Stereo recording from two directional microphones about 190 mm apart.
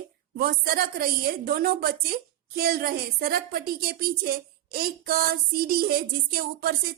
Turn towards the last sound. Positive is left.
turn(degrees=-50)  # may be behind; listen again after turning